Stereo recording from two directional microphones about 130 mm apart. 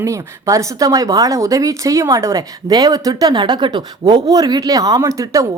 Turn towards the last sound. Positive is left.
turn(degrees=-25)  # may be behind; listen again after turning